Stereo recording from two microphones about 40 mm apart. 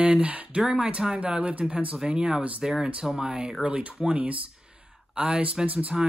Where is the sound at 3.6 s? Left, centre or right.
Right.